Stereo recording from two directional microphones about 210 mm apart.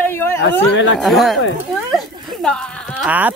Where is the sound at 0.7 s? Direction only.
60° left (ahead or behind).